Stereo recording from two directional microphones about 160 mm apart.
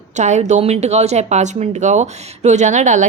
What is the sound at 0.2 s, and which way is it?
Speech, 50° right (ahead or behind).